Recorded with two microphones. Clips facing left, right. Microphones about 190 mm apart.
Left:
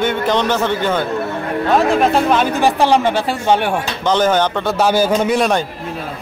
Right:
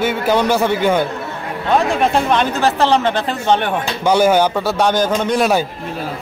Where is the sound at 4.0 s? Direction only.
10° right (ahead or behind); by 5.4 s 10° left (ahead or behind).